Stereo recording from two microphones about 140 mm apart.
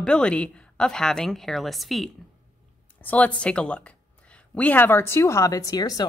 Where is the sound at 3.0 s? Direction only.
10° left (ahead or behind).